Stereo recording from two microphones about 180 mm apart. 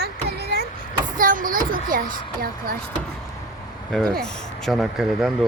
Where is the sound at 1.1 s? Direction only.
50° right (ahead or behind).